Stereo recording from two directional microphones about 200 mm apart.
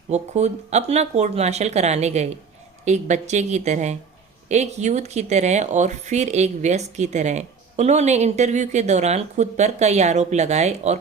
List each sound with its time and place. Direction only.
0.1 s speech: 35° right (ahead or behind)